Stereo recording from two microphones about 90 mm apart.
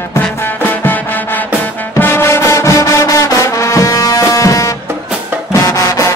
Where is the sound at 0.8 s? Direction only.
20° left (ahead or behind).